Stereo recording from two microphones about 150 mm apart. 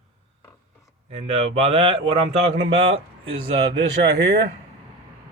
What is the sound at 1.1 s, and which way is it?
Speech, 45° right (ahead or behind).